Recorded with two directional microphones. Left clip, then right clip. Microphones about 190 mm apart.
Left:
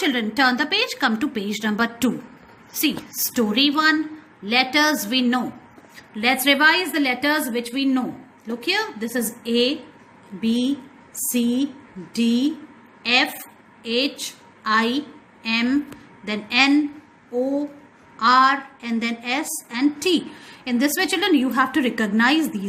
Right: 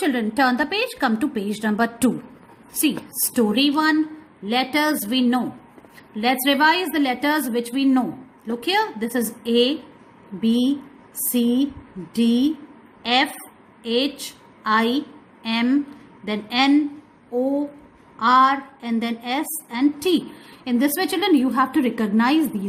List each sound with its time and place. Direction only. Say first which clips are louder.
0.0 s a woman's voice: left 1 dB; 20° right (ahead or behind)
18.2 s a woman's voice: even; 25° right (ahead or behind)